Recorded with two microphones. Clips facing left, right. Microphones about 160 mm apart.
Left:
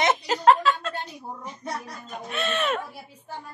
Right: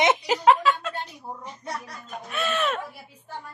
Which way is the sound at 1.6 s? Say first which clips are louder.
Left 3 dB; 55° left (ahead or behind).